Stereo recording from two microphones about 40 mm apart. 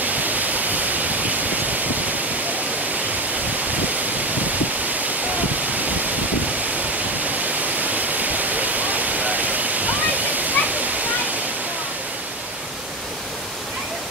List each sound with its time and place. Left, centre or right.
0.0 s waterfall: right
7.2 s waterfall: right